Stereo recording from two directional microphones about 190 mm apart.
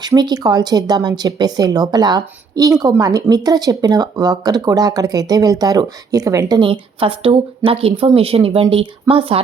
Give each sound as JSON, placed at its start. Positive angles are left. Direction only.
{"t": 0.0, "sound": "speech", "side_deg": -20}